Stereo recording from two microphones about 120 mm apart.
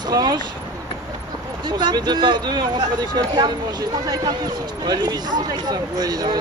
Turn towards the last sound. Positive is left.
turn(degrees=-35)  # may be behind; listen again after turning